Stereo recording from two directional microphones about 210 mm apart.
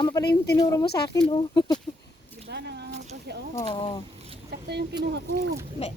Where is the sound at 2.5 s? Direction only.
50° right (ahead or behind).